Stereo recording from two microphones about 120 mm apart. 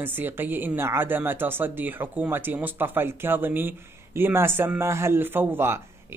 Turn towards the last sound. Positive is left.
turn(degrees=-20)  # may be behind; listen again after turning